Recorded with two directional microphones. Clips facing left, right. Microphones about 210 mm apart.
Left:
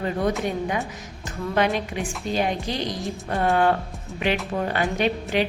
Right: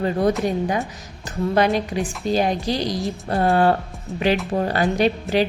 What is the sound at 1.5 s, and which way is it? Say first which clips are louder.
A woman's voice: right 3 dB; 35° right (ahead or behind).